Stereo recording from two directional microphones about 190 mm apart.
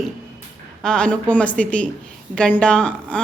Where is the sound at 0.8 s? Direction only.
5° left (ahead or behind).